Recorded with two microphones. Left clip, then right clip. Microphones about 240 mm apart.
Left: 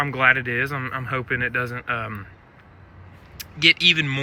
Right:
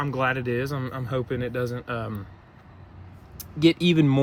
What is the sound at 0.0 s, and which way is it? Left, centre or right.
Speech, centre.